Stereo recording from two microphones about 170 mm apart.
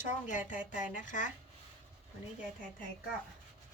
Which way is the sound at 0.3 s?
50° left (ahead or behind).